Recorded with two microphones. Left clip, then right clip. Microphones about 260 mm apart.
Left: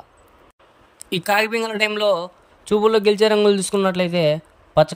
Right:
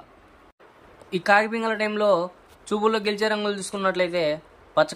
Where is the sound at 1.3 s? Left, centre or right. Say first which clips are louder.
Left 1 dB; left.